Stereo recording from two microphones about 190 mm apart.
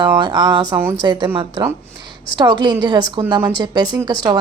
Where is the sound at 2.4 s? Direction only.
20° right (ahead or behind).